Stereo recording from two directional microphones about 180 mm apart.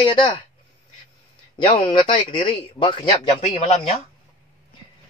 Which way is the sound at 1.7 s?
30° left (ahead or behind).